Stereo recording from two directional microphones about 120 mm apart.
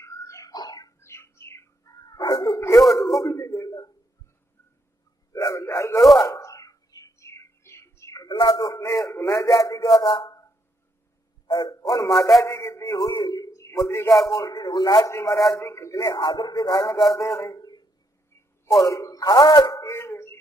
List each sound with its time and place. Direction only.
0.0 s bird: 25° left (ahead or behind)
2.0 s dog: 35° left (ahead or behind)
3.2 s a sound: 30° left (ahead or behind)
5.3 s a sound: 25° left (ahead or behind)
8.4 s a man's voice: 35° left (ahead or behind)
15.3 s a man's voice: centre (ahead or behind)
15.6 s a man's voice: 25° left (ahead or behind)